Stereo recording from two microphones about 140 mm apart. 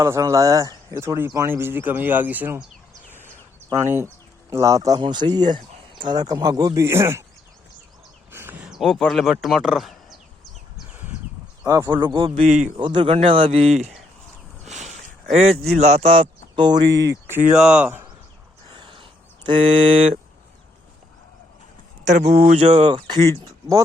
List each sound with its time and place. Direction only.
0.0 s speech: 20° right (ahead or behind)
3.8 s speech: 20° right (ahead or behind)
8.3 s speech: 15° right (ahead or behind)
11.6 s speech: 25° right (ahead or behind)
11.9 s speech: 35° right (ahead or behind)
12.4 s speech: 60° right (ahead or behind)
12.7 s speech: 35° right (ahead or behind); by 13.9 s 50° right (ahead or behind)
14.6 s a sound: 55° right (ahead or behind)
15.8 s speech: 50° right (ahead or behind); by 17.4 s 20° right (ahead or behind)
17.5 s speech: 5° right (ahead or behind)
18.7 s a sound: 35° right (ahead or behind)
19.5 s speech: 40° right (ahead or behind)
22.0 s speech: 55° right (ahead or behind)
22.8 s speech: 35° right (ahead or behind)